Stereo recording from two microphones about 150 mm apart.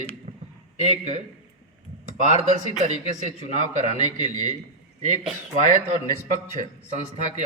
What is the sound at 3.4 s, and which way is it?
A man's voice, 55° right (ahead or behind).